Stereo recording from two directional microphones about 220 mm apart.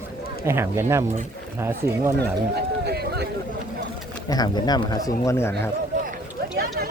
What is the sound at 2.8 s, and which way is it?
Run, 45° right (ahead or behind).